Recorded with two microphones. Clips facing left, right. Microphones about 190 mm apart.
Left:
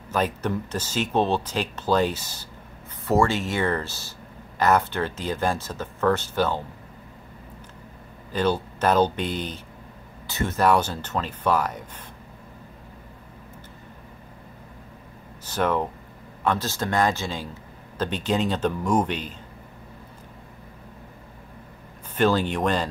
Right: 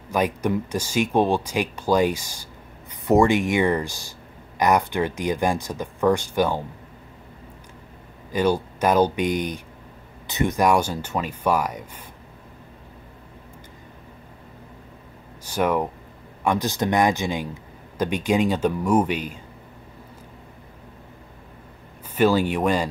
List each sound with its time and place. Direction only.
0.1 s speech: 10° right (ahead or behind)
8.3 s speech: 10° right (ahead or behind)
15.4 s speech: 10° right (ahead or behind)
22.1 s speech: 10° right (ahead or behind)